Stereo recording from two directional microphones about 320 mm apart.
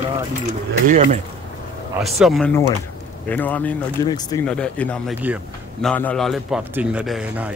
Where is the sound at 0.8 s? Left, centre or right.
Right.